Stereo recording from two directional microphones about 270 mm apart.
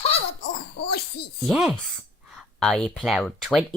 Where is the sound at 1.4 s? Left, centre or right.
Centre.